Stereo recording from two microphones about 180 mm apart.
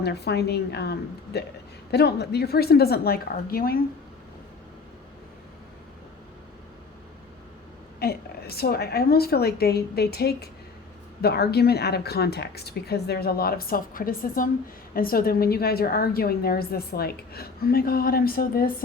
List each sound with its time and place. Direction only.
0.0 s a woman's voice: 65° left (ahead or behind)
7.9 s a woman's voice: 60° left (ahead or behind)